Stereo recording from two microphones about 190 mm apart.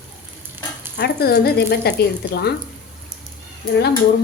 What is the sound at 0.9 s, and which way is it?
A woman's voice, 60° left (ahead or behind).